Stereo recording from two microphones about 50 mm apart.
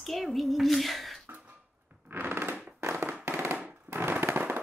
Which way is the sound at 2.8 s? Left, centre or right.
Right.